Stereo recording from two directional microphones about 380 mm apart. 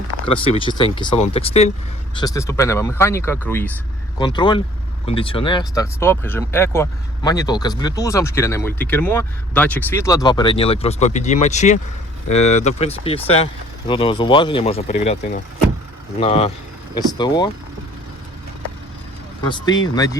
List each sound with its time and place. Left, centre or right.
0.3 s speech: centre
16.2 s speech: centre
19.5 s speech: centre